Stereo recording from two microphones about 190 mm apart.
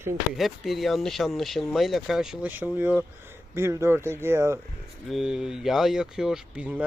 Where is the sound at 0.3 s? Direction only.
Centre (ahead or behind).